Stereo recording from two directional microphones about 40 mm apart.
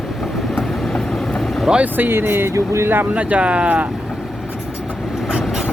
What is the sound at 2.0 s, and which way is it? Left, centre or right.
Speech, right.